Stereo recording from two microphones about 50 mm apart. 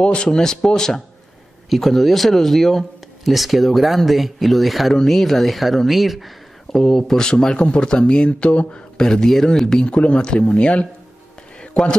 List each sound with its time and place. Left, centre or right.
0.0 s speech: centre
8.9 s speech: centre